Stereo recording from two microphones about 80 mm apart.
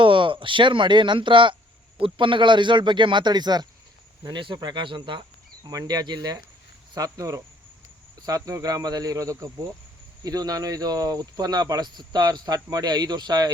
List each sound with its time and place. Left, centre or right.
0.0 s speech: right
4.3 s speech: right
5.6 s speech: right
6.9 s speech: right